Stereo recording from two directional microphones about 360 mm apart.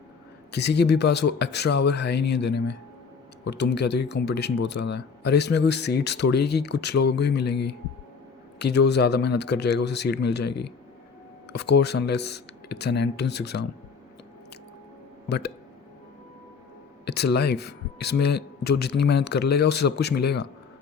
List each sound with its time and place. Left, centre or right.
0.5 s speech: left
15.3 s speech: left
17.3 s speech: left